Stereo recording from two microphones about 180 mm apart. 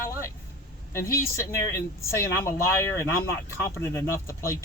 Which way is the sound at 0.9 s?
15° left (ahead or behind).